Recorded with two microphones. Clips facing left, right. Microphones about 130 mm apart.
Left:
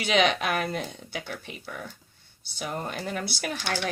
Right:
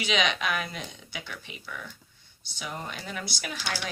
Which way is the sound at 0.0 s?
45° left (ahead or behind).